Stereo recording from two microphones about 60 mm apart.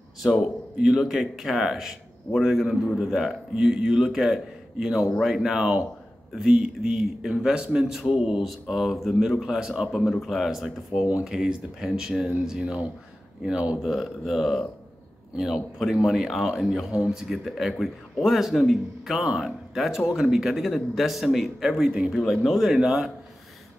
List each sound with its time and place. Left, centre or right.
0.2 s a man's voice: centre
9.8 s a man's voice: centre
13.7 s a man's voice: centre
16.9 s a man's voice: centre
19.1 s a man's voice: centre
22.1 s a man's voice: centre
22.8 s speech: centre